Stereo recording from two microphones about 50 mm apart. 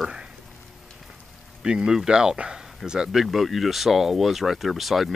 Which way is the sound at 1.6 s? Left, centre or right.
Centre.